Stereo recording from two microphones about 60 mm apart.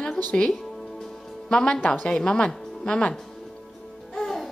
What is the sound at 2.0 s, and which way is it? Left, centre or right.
Speech, centre.